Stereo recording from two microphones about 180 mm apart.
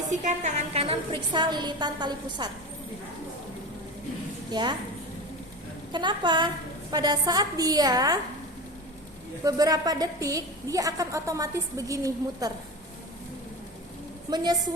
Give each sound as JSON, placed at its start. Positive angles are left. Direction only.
{"t": 0.1, "sound": "a woman's voice", "side_deg": -40}
{"t": 4.5, "sound": "a woman's voice", "side_deg": -25}
{"t": 5.9, "sound": "a woman's voice", "side_deg": -25}
{"t": 9.4, "sound": "a woman's voice", "side_deg": -20}
{"t": 14.3, "sound": "a woman's voice", "side_deg": -20}